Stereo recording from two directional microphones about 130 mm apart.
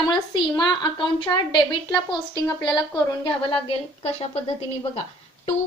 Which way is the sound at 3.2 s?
45° left (ahead or behind).